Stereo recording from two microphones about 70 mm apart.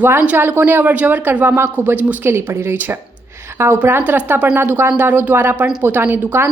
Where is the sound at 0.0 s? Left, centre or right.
Right.